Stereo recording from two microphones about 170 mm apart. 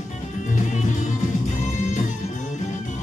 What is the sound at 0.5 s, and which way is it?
Music, 50° left (ahead or behind).